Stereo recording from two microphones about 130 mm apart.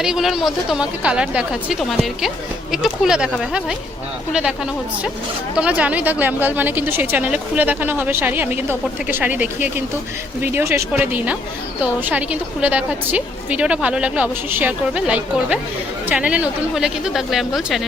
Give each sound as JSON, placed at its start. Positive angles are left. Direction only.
{"t": 0.0, "sound": "a woman's voice", "side_deg": -5}
{"t": 5.5, "sound": "a woman's voice", "side_deg": -10}